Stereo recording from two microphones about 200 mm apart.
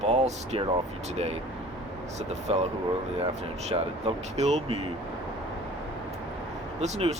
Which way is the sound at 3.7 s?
30° right (ahead or behind).